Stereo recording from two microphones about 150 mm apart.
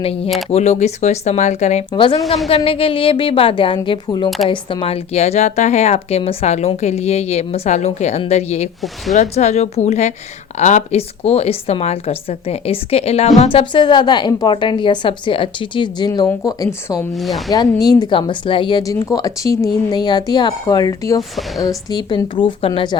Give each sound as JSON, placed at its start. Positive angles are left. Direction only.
{"t": 0.0, "sound": "a woman's voice", "side_deg": 40}
{"t": 1.9, "sound": "a woman's voice", "side_deg": 35}
{"t": 2.2, "sound": "speech", "side_deg": 0}
{"t": 2.6, "sound": "a woman's voice", "side_deg": 40}
{"t": 17.1, "sound": "speech", "side_deg": 0}
{"t": 17.5, "sound": "speech", "side_deg": 25}
{"t": 21.2, "sound": "speech", "side_deg": 0}
{"t": 21.6, "sound": "a woman's voice", "side_deg": 25}